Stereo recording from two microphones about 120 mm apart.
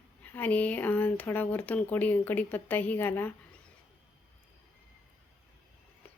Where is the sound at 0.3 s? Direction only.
15° left (ahead or behind).